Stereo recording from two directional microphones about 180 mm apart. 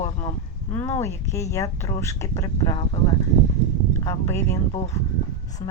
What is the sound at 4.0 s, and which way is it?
Speech, 20° left (ahead or behind).